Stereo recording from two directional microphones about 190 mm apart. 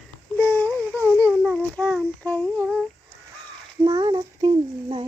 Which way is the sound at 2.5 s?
15° right (ahead or behind).